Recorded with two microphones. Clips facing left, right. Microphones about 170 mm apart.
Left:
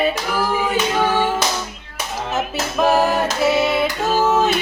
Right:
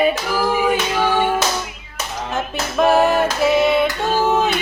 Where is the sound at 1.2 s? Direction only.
10° right (ahead or behind).